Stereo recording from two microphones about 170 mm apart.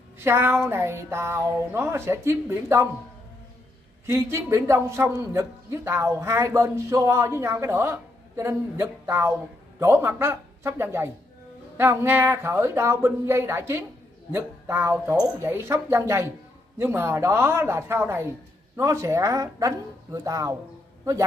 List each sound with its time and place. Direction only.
0.2 s a man's voice: 15° right (ahead or behind)
4.0 s a man's voice: 15° right (ahead or behind)